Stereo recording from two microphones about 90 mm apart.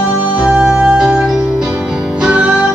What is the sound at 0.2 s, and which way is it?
Music, 10° right (ahead or behind).